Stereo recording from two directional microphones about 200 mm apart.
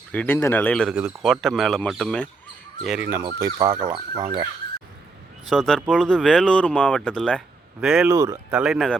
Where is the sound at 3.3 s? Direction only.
15° right (ahead or behind).